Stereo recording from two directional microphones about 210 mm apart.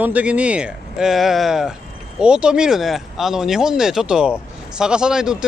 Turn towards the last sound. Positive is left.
turn(degrees=-5)  # may be behind; listen again after turning